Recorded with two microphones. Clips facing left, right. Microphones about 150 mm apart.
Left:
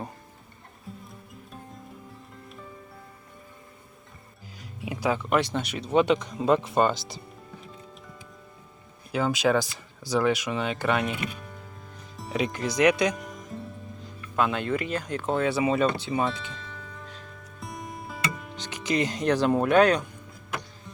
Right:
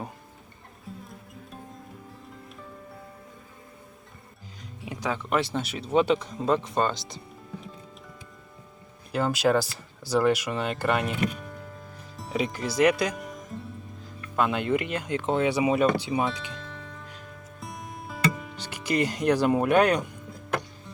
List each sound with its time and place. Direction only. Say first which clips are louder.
0.9 s music: right 1 dB; centre (ahead or behind)
4.8 s speech: left 4 dB; 5° left (ahead or behind)
9.1 s speech: even; 5° right (ahead or behind)
14.6 s speech: right 2 dB; 15° right (ahead or behind)
16.1 s speech: even; centre (ahead or behind)
16.5 s music: right 2 dB; centre (ahead or behind)